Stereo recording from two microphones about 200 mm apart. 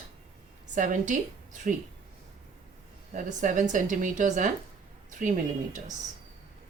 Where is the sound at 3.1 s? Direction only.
40° right (ahead or behind).